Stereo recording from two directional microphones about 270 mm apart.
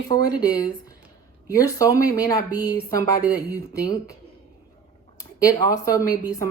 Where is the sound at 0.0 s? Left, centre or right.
Centre.